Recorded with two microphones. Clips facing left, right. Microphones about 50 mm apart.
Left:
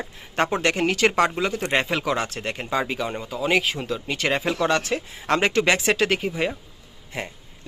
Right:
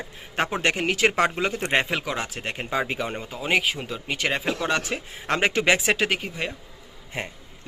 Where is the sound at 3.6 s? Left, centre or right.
Centre.